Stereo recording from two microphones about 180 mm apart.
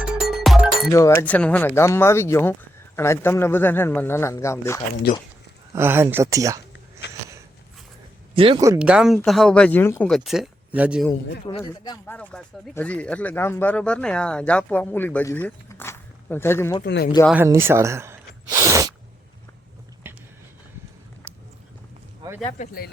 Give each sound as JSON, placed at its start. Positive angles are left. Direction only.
{"t": 0.0, "sound": "music", "side_deg": -5}
{"t": 0.9, "sound": "speech", "side_deg": 15}
{"t": 5.1, "sound": "speech", "side_deg": 55}
{"t": 5.7, "sound": "speech", "side_deg": -15}
{"t": 8.4, "sound": "speech", "side_deg": -30}
{"t": 8.8, "sound": "speech", "side_deg": -5}
{"t": 10.1, "sound": "speech", "side_deg": 0}
{"t": 12.0, "sound": "speech", "side_deg": 5}
{"t": 16.8, "sound": "speech", "side_deg": 65}
{"t": 17.3, "sound": "speech", "side_deg": -15}
{"t": 20.1, "sound": "a sound", "side_deg": -10}
{"t": 22.4, "sound": "speech", "side_deg": 45}